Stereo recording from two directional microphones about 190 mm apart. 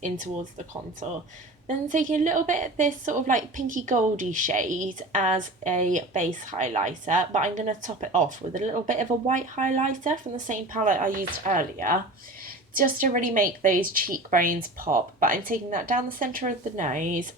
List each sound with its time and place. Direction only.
1.6 s a woman's voice: 40° right (ahead or behind)